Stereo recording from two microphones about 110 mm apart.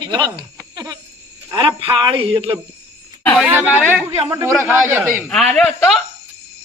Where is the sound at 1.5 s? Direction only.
50° right (ahead or behind).